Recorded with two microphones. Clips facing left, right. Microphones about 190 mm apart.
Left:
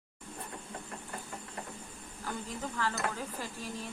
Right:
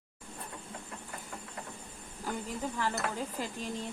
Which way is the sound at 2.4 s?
15° right (ahead or behind).